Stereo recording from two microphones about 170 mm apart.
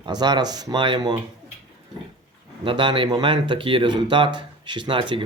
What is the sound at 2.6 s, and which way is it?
Speech, 30° right (ahead or behind).